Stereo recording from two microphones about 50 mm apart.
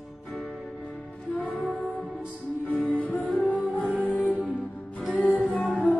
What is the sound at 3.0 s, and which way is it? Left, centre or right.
Music, left.